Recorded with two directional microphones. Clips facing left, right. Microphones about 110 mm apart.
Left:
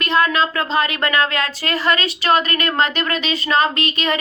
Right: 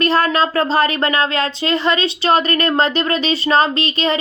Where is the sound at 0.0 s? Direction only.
35° right (ahead or behind).